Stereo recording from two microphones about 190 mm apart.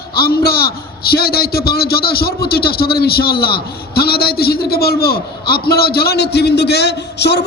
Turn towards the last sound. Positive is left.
turn(degrees=60)  # may be behind; listen again after turning